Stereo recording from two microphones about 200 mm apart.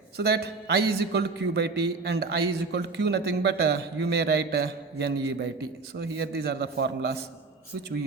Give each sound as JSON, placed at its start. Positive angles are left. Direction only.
{"t": 0.2, "sound": "a man's voice", "side_deg": -55}